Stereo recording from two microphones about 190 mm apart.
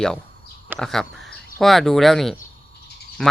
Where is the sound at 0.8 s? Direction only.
Centre (ahead or behind).